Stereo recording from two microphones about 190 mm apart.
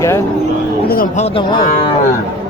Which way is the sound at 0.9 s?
50° left (ahead or behind).